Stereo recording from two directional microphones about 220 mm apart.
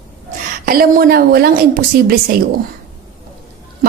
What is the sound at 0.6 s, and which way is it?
A woman's voice, 40° right (ahead or behind).